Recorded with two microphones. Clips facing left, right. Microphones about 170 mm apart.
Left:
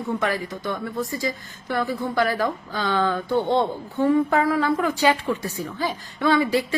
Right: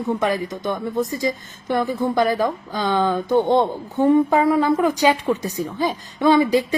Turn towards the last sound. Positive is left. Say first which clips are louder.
# right 4 dB
turn(degrees=-20)  # may be behind; listen again after turning